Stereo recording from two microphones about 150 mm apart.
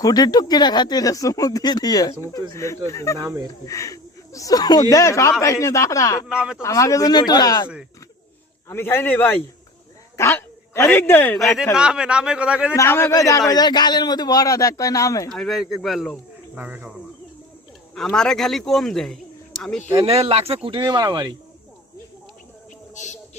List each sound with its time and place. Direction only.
0.0 s speech: 25° left (ahead or behind)
3.2 s speech: 20° right (ahead or behind)
3.7 s speech: 20° left (ahead or behind)
6.2 s speech: 5° right (ahead or behind)
6.6 s speech: 20° left (ahead or behind)
8.7 s a man's voice: 15° left (ahead or behind)
11.3 s a man's voice: centre (ahead or behind)
12.7 s speech: 20° left (ahead or behind)
15.3 s speech: centre (ahead or behind)
16.6 s a man's voice: 10° right (ahead or behind)
17.9 s speech: 5° left (ahead or behind)
20.1 s speech: 40° right (ahead or behind)